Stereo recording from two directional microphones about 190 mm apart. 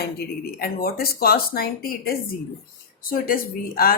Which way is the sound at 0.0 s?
55° left (ahead or behind).